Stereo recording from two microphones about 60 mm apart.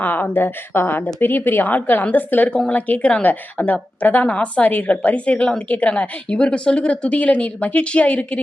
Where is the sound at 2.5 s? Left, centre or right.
Centre.